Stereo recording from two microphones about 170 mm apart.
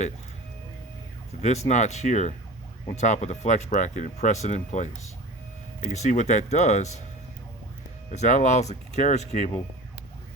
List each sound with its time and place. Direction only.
1.4 s speech: 40° left (ahead or behind)
5.9 s speech: 45° left (ahead or behind)
8.1 s speech: 45° left (ahead or behind)